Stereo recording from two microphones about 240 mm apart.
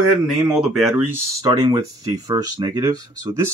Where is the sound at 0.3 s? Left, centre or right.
Centre.